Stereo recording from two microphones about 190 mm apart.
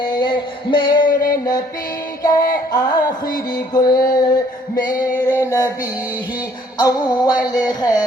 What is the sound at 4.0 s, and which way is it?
Music, 20° left (ahead or behind).